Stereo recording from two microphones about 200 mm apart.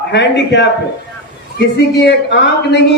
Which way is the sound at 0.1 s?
60° left (ahead or behind).